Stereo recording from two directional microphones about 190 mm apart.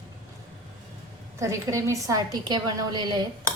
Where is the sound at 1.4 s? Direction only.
15° right (ahead or behind).